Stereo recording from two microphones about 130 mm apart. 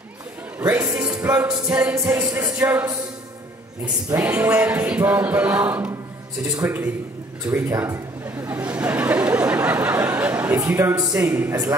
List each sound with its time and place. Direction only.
0.6 s a man's voice: 15° right (ahead or behind)
1.1 s music: 15° right (ahead or behind)
2.0 s music: 25° right (ahead or behind)
4.1 s music: 20° right (ahead or behind)
6.4 s music: 25° right (ahead or behind)
7.4 s a man's voice: 20° right (ahead or behind)
8.5 s chatter: 10° right (ahead or behind)
9.9 s a sound: 15° right (ahead or behind)
10.7 s music: 15° right (ahead or behind)
11.0 s music: 25° right (ahead or behind)